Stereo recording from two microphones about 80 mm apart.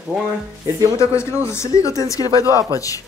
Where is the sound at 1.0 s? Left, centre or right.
Left.